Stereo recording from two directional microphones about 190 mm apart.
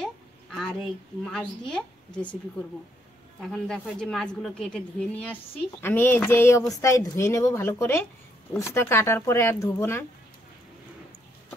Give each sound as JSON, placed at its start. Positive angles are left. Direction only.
{"t": 0.0, "sound": "a sound", "side_deg": 5}
{"t": 1.2, "sound": "a woman's voice", "side_deg": 5}
{"t": 3.4, "sound": "a woman's voice", "side_deg": 0}